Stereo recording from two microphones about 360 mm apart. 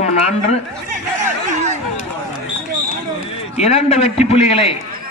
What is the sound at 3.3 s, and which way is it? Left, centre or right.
A man's voice, centre.